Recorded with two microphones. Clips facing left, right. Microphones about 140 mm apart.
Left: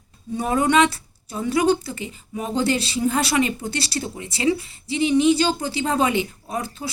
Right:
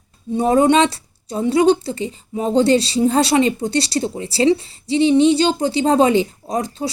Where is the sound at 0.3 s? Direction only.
30° right (ahead or behind).